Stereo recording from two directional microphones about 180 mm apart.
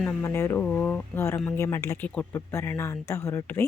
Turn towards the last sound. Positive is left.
turn(degrees=15)  # may be behind; listen again after turning